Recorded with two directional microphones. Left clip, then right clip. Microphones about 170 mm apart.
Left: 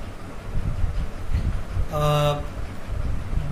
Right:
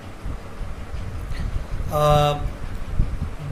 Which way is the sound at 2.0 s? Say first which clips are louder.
Right 5 dB; 30° right (ahead or behind).